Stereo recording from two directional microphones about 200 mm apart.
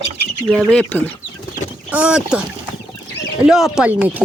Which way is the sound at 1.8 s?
5° right (ahead or behind).